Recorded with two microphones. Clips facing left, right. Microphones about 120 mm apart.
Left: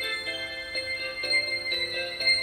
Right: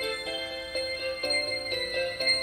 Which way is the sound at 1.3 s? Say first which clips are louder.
Right 3 dB; 25° right (ahead or behind).